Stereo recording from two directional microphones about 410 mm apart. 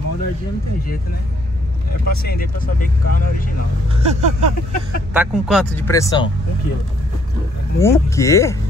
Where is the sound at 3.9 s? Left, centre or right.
Centre.